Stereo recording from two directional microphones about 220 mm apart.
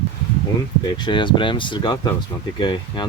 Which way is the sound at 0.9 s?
20° left (ahead or behind).